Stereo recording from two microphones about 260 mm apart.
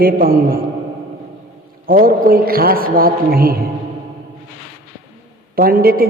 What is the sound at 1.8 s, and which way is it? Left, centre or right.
A woman's voice, right.